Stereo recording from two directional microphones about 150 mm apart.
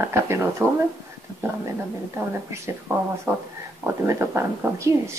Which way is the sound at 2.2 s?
20° right (ahead or behind).